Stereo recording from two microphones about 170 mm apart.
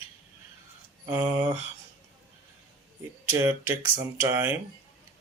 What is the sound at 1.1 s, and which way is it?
Speech, 15° right (ahead or behind).